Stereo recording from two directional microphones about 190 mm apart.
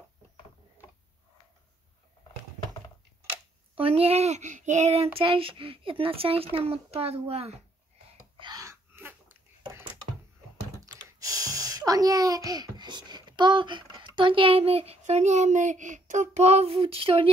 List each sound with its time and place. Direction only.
3.7 s speech: 30° right (ahead or behind)
8.4 s wheeze: 20° right (ahead or behind)
9.6 s a sound: 15° right (ahead or behind)
10.8 s speech: 15° right (ahead or behind)